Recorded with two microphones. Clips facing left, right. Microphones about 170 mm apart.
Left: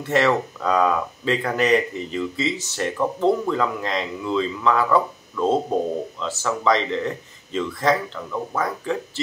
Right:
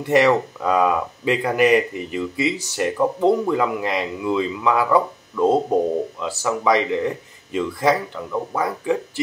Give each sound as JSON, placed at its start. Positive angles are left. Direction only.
{"t": 0.0, "sound": "speech", "side_deg": -15}